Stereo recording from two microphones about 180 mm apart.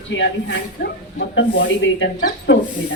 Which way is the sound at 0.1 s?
80° left.